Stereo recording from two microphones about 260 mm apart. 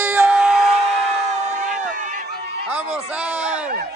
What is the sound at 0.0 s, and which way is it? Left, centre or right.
Screaming, centre.